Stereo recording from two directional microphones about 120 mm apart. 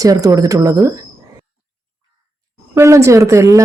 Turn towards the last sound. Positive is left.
turn(degrees=-25)  # may be behind; listen again after turning